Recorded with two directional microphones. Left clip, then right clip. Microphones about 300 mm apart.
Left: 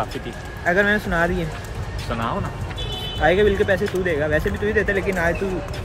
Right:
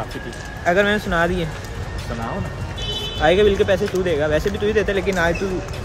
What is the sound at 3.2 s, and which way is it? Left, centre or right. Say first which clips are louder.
Speech: right 2 dB; centre.